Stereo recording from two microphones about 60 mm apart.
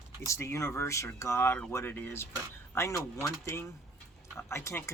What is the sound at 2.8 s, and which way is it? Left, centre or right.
Speech, left.